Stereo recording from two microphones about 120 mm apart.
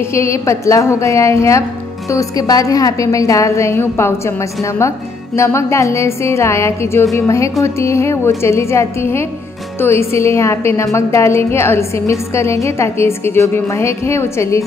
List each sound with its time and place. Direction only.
0.0 s a woman's voice: 25° left (ahead or behind)